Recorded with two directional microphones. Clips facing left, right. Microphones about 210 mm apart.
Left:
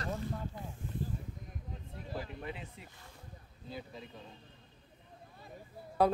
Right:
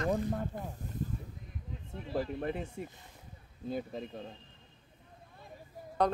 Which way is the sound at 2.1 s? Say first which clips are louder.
Right 9 dB; 45° right (ahead or behind).